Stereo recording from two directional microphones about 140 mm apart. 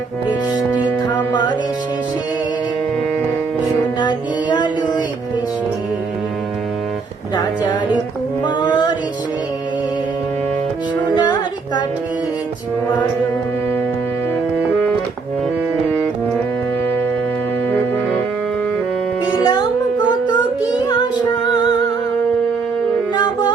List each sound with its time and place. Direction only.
1.1 s music: 30° left (ahead or behind)
4.0 s music: 30° left (ahead or behind)
8.4 s music: 30° left (ahead or behind)
11.2 s music: 30° left (ahead or behind)
19.2 s music: 30° left (ahead or behind)
20.1 s child singing: 30° left (ahead or behind)
23.1 s music: 30° left (ahead or behind)